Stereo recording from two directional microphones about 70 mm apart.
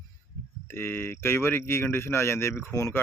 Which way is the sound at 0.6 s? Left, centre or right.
Left.